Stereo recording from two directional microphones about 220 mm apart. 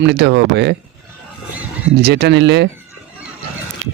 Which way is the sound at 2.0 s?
50° right (ahead or behind).